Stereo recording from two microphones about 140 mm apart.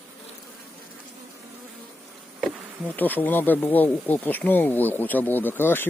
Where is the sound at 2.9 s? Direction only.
10° left (ahead or behind).